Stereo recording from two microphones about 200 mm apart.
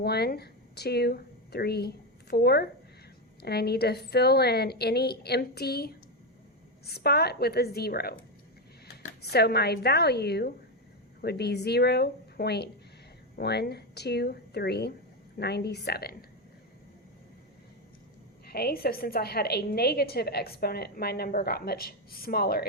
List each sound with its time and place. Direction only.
0.0 s a woman's voice: 55° left (ahead or behind)
9.3 s a woman's voice: 55° left (ahead or behind)
18.4 s a woman's voice: 50° left (ahead or behind)